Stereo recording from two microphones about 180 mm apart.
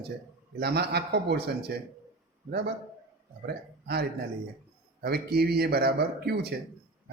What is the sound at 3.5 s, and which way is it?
Speech, 65° right (ahead or behind).